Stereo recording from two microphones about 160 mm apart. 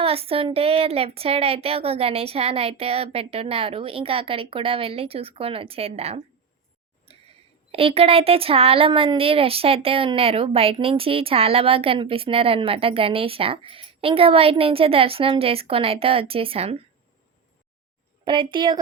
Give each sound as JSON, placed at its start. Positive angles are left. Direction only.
{"t": 0.0, "sound": "speech", "side_deg": -35}
{"t": 7.1, "sound": "a sound", "side_deg": -40}
{"t": 7.7, "sound": "speech", "side_deg": -35}
{"t": 18.3, "sound": "a woman's voice", "side_deg": -30}